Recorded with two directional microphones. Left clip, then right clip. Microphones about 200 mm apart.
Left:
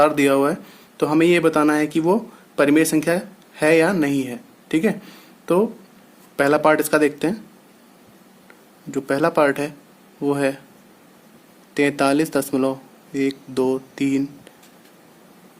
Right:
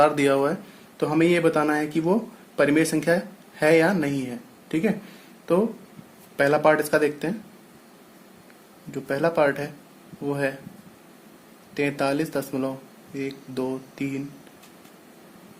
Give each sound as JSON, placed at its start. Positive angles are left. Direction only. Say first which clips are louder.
{"t": 0.0, "sound": "speech", "louder": "left 3 dB", "side_deg": 30}
{"t": 6.3, "sound": "speech", "louder": "left 3 dB", "side_deg": 40}
{"t": 8.9, "sound": "speech", "louder": "left 4 dB", "side_deg": 40}
{"t": 11.7, "sound": "speech", "louder": "left 6 dB", "side_deg": 40}